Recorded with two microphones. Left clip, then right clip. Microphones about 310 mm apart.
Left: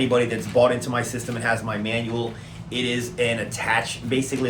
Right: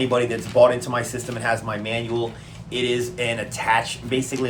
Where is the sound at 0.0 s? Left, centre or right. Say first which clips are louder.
Even; centre.